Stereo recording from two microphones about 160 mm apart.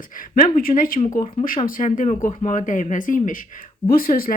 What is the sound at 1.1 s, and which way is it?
Speech, 30° left (ahead or behind).